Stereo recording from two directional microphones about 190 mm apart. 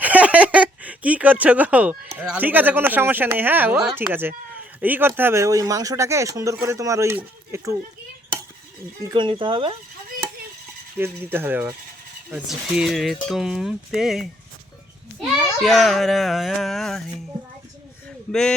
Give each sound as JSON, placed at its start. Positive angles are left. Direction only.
{"t": 0.0, "sound": "a sound", "side_deg": -5}
{"t": 2.1, "sound": "speech", "side_deg": -5}
{"t": 9.0, "sound": "speech", "side_deg": -25}
{"t": 10.9, "sound": "speech", "side_deg": -10}
{"t": 18.3, "sound": "speech", "side_deg": 5}